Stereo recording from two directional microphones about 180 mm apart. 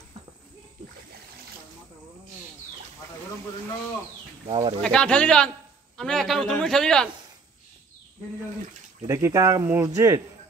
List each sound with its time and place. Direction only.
4.5 s speech: 25° right (ahead or behind)
4.8 s a man's voice: 5° left (ahead or behind)
9.0 s speech: 15° right (ahead or behind)